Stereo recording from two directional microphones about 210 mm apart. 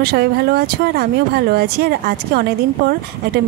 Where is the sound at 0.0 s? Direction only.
45° right (ahead or behind).